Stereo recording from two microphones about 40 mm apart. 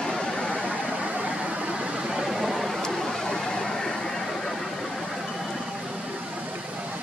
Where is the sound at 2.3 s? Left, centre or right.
Centre.